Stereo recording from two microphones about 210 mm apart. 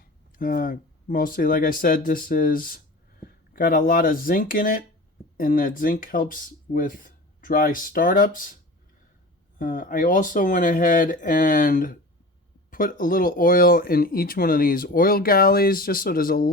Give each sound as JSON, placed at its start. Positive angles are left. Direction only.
{"t": 0.3, "sound": "speech", "side_deg": 40}
{"t": 9.6, "sound": "speech", "side_deg": 40}